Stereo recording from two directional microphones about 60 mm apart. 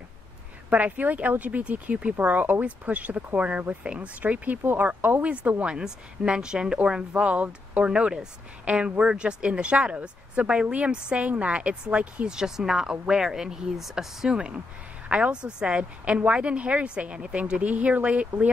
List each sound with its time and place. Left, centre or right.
0.7 s a woman's voice: right